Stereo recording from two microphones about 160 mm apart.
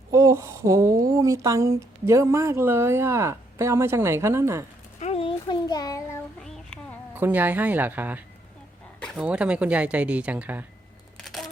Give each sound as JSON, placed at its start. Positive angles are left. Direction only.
{"t": 0.1, "sound": "speech", "side_deg": -20}
{"t": 4.9, "sound": "a sound", "side_deg": 40}
{"t": 7.1, "sound": "speech", "side_deg": -10}
{"t": 9.0, "sound": "a sound", "side_deg": 5}
{"t": 9.2, "sound": "speech", "side_deg": -5}
{"t": 11.2, "sound": "single-lens reflex camera", "side_deg": 0}